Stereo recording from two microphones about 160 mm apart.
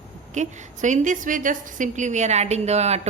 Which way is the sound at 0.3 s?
50° right (ahead or behind).